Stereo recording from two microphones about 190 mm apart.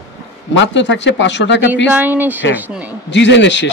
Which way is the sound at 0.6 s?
70° left (ahead or behind).